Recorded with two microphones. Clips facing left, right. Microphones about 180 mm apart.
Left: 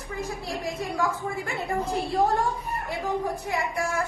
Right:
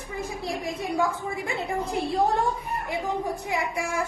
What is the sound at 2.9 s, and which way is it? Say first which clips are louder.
A woman's voice: even; 15° right (ahead or behind).